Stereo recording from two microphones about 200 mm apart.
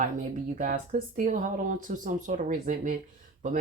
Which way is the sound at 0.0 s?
40° right (ahead or behind).